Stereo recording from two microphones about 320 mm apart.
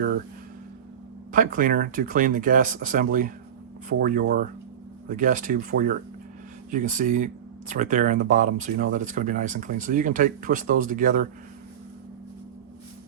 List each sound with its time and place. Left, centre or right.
1.3 s speech: right